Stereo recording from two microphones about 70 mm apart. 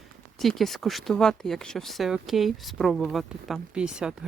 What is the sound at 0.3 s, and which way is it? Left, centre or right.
Speech, centre.